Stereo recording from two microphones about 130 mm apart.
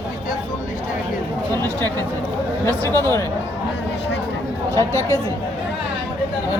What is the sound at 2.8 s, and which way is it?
Speech, 25° right (ahead or behind).